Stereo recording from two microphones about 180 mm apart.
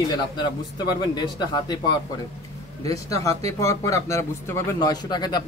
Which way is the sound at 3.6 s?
15° left (ahead or behind).